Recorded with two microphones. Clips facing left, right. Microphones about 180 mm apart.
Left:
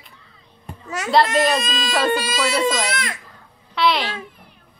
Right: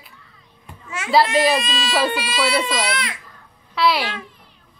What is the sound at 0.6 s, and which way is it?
Children playing, 40° left (ahead or behind).